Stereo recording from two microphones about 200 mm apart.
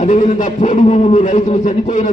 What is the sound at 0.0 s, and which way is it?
A man's voice, 40° left (ahead or behind).